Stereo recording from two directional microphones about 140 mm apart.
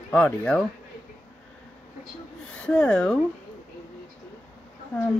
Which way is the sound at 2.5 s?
10° left (ahead or behind).